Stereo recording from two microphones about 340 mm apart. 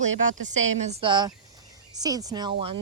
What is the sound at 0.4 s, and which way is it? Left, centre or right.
Speech, centre.